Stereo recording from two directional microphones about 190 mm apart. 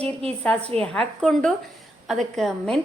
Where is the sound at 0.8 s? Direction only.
5° left (ahead or behind).